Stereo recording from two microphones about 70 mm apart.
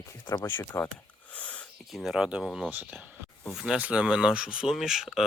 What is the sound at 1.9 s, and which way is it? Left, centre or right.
Speech, centre.